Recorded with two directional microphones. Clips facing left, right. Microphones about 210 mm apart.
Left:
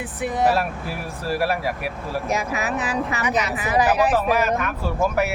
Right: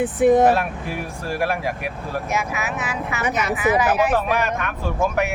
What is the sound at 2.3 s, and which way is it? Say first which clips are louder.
Speech: left 3 dB; 35° left (ahead or behind).